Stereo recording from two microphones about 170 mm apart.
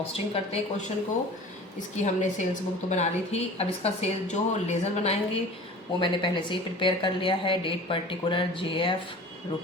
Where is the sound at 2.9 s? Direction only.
40° left (ahead or behind).